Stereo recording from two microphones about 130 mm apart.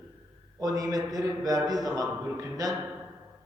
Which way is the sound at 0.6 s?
25° right (ahead or behind).